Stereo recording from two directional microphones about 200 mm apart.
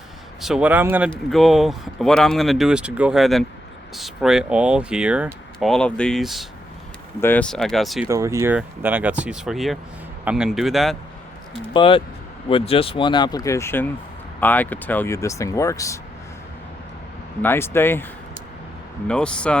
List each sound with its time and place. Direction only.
0.4 s speech: 5° right (ahead or behind)
8.0 s speech: 15° right (ahead or behind)
11.7 s speech: 25° left (ahead or behind)
17.4 s speech: 10° left (ahead or behind)
19.0 s speech: 5° left (ahead or behind)